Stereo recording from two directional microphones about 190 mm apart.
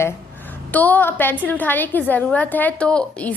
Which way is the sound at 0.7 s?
10° left (ahead or behind).